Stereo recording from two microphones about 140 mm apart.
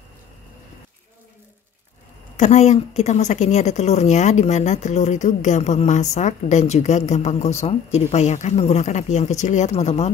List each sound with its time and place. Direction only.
2.3 s a woman's voice: 55° left (ahead or behind)